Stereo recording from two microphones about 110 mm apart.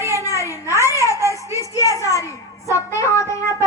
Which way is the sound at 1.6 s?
30° left (ahead or behind).